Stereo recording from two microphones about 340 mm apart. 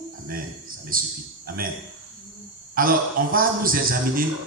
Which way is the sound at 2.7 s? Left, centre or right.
Right.